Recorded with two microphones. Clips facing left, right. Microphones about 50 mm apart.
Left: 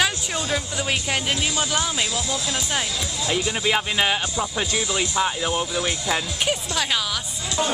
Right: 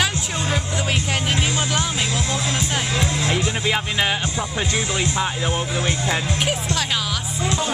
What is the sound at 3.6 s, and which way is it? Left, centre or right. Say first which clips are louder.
Speech: left 2 dB; centre.